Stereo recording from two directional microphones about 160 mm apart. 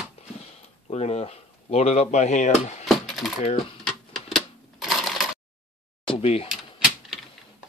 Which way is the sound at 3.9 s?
Centre (ahead or behind).